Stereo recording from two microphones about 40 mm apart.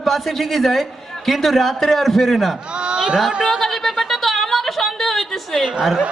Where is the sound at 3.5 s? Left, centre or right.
Centre.